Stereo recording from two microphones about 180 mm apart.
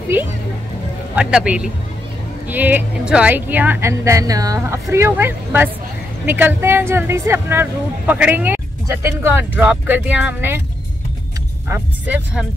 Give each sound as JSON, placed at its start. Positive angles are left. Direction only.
{"t": 1.1, "sound": "a man's voice", "side_deg": -5}
{"t": 11.7, "sound": "speech", "side_deg": -10}